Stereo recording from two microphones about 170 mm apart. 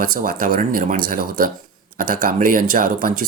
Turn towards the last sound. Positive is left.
turn(degrees=-55)  # may be behind; listen again after turning